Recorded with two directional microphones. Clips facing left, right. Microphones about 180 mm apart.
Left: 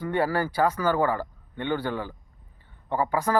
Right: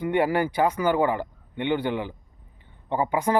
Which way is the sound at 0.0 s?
20° right (ahead or behind).